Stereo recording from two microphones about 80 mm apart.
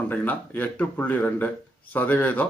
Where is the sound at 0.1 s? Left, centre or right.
Left.